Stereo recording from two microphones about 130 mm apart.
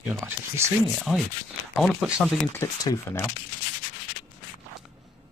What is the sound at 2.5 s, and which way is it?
Speech, 25° left (ahead or behind).